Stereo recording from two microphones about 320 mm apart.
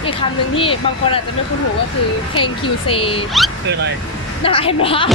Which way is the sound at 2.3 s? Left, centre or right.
Centre.